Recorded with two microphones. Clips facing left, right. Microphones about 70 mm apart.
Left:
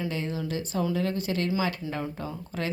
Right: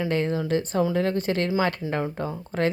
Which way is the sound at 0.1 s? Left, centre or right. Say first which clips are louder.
Right 7 dB; right.